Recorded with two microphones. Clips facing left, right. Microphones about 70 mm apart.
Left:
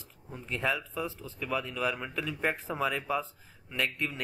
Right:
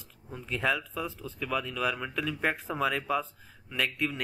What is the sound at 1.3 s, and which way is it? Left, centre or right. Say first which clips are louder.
Speech: right 1 dB; left.